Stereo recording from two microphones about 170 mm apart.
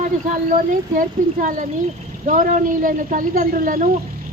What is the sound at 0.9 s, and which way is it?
A woman's voice, 50° right (ahead or behind).